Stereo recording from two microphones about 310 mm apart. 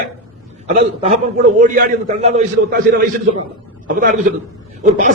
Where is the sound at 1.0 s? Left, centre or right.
Right.